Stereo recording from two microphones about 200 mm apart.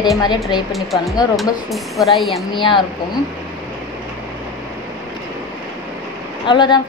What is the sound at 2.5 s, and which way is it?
Speech, 25° left (ahead or behind).